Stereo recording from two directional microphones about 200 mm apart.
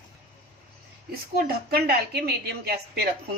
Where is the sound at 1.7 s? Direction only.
50° right (ahead or behind).